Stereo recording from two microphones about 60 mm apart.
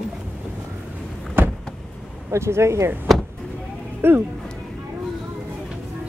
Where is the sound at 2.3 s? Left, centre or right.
Right.